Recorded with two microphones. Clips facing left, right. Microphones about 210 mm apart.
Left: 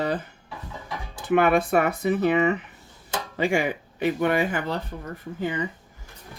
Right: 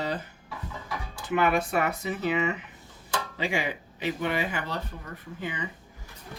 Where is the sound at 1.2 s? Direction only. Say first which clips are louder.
Left 5 dB; 55° left (ahead or behind).